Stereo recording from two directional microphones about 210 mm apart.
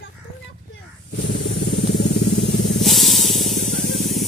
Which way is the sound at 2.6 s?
Centre (ahead or behind).